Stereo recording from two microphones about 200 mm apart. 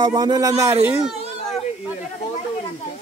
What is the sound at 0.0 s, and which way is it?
Speech, 20° right (ahead or behind).